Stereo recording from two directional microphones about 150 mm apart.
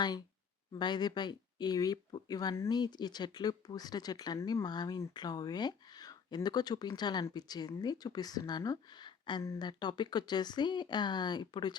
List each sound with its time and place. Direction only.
0.8 s speech: 30° left (ahead or behind)